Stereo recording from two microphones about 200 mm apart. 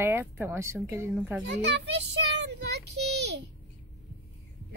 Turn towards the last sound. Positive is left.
turn(degrees=-60)  # may be behind; listen again after turning